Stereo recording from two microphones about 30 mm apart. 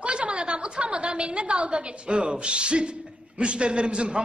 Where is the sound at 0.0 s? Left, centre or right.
Right.